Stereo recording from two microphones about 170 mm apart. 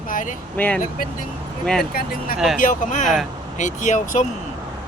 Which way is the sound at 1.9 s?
60° left (ahead or behind).